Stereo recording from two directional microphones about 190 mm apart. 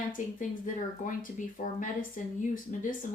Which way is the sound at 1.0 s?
45° left (ahead or behind).